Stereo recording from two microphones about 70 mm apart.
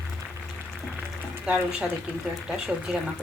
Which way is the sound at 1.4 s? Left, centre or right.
Centre.